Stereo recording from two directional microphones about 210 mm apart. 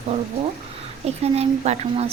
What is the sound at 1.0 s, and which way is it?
Speech, 30° right (ahead or behind).